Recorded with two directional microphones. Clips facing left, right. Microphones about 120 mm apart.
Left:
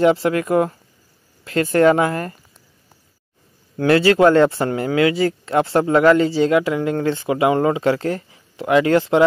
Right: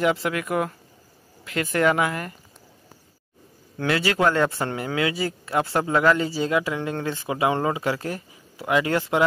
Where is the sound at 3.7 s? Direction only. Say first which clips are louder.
Left 9 dB; 40° left (ahead or behind).